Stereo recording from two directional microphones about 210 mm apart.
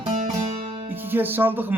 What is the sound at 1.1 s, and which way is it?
Speech, 10° right (ahead or behind).